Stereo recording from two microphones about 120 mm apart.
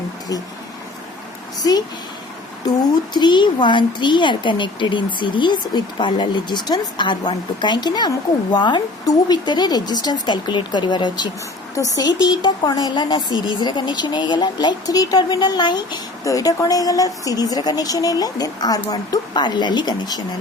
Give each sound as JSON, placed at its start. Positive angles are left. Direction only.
{"t": 2.6, "sound": "speech", "side_deg": 35}